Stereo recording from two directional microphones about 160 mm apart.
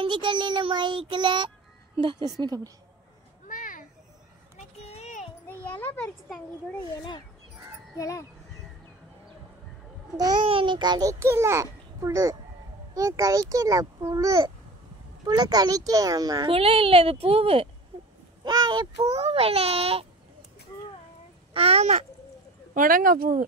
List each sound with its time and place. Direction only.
0.0 s a child's voice: 30° right (ahead or behind)
3.4 s a sound: 55° left (ahead or behind)
4.6 s a sound: 40° left (ahead or behind)
5.5 s a child's voice: 10° left (ahead or behind)
8.0 s speech: 20° left (ahead or behind)
10.1 s a child's voice: 30° right (ahead or behind)
16.5 s a child's voice: 35° right (ahead or behind)
21.5 s a child's voice: 40° right (ahead or behind)
22.8 s speech: 60° right (ahead or behind)